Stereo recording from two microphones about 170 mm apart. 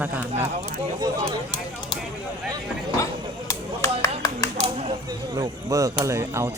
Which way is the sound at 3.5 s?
20° left (ahead or behind).